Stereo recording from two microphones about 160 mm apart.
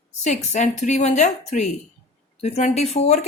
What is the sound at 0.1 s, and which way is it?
Speech, 50° left (ahead or behind).